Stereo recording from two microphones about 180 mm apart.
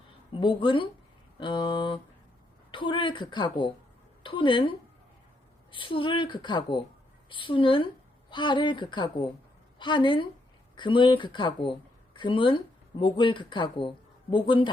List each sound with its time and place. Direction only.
0.3 s a woman's voice: 30° left (ahead or behind)
5.7 s a woman's voice: 30° left (ahead or behind)